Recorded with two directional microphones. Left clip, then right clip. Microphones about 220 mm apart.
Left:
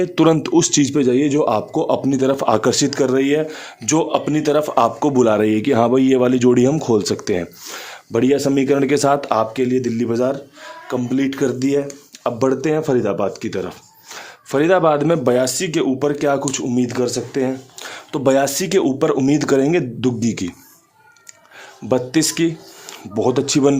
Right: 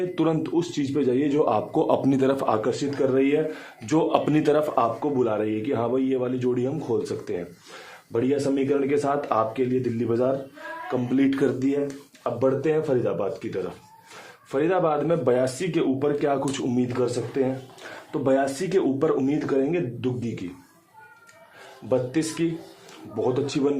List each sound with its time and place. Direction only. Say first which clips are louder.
0.0 s a man's voice: left 9 dB; 35° left (ahead or behind)
1.7 s speech: left 4 dB; 20° left (ahead or behind)
2.6 s speech: left 7 dB; 50° left (ahead or behind)
3.8 s speech: left 4 dB; 25° left (ahead or behind)
4.7 s speech: left 7 dB; 45° left (ahead or behind)
10.8 s speech: left 3 dB; 25° left (ahead or behind)
12.2 s speech: left 5 dB; 50° left (ahead or behind)
16.4 s speech: left 5 dB; 25° left (ahead or behind)
16.7 s speech: left 6 dB; 45° left (ahead or behind)
21.8 s speech: left 7 dB; 50° left (ahead or behind)